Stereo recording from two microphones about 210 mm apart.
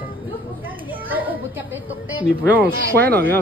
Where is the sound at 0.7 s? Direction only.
10° right (ahead or behind).